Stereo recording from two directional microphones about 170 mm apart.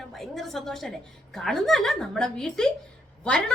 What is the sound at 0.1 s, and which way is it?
A woman's voice, centre (ahead or behind).